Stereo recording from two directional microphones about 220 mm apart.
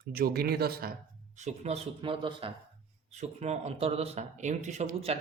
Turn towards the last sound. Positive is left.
turn(degrees=-30)  # may be behind; listen again after turning